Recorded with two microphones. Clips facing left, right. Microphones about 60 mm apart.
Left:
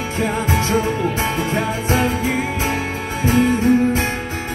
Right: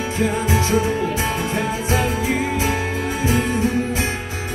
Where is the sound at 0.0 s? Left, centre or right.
Left.